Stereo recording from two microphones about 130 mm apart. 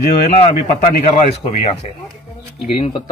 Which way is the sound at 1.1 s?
55° left (ahead or behind).